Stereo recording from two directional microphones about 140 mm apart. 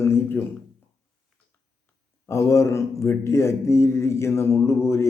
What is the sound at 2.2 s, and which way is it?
A man's voice, 20° left (ahead or behind).